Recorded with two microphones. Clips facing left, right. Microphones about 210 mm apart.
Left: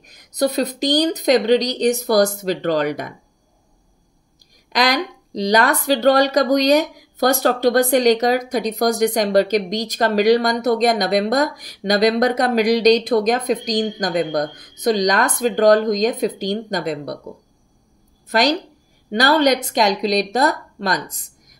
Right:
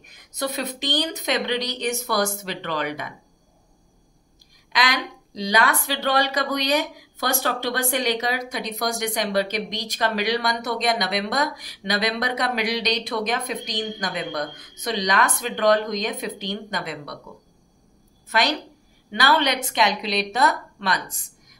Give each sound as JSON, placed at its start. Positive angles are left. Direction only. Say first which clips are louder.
{"t": 0.0, "sound": "speech", "louder": "left 9 dB", "side_deg": 40}
{"t": 4.7, "sound": "speech", "louder": "left 6 dB", "side_deg": 40}
{"t": 18.3, "sound": "speech", "louder": "left 6 dB", "side_deg": 40}